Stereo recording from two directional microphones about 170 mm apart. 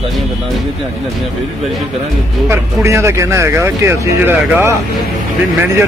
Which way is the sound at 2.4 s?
15° right (ahead or behind).